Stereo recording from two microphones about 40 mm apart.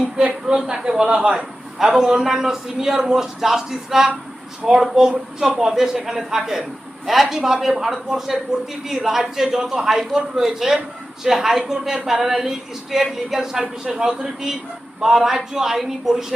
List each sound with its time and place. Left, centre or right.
0.0 s a sound: right
0.4 s speech: centre
1.8 s a man's voice: centre